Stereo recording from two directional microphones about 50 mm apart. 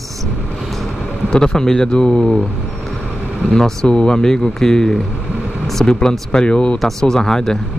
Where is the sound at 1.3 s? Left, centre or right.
Centre.